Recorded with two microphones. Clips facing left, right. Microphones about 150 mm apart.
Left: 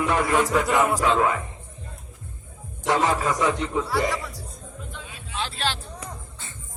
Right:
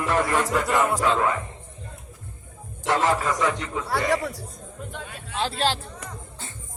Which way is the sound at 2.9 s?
15° left (ahead or behind).